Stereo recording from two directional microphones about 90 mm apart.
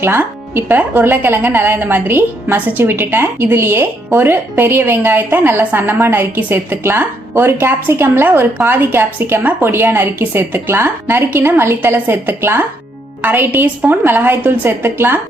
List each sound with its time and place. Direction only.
0.0 s speech: 25° right (ahead or behind)